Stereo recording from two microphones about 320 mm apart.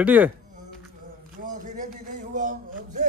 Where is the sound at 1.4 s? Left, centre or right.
Right.